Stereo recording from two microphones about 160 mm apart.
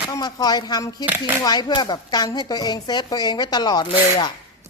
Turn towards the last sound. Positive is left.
turn(degrees=25)  # may be behind; listen again after turning